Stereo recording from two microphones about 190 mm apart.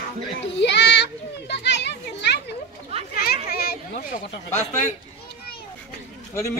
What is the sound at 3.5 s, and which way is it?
Speech, 55° left (ahead or behind).